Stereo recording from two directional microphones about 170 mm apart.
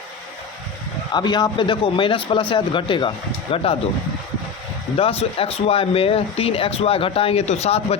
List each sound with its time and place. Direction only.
1.1 s a man's voice: 25° left (ahead or behind)
4.9 s speech: 35° left (ahead or behind)